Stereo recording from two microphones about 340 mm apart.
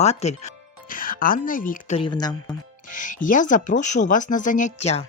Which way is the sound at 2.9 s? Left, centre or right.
Left.